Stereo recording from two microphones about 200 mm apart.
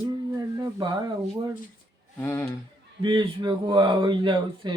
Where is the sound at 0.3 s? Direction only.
20° right (ahead or behind).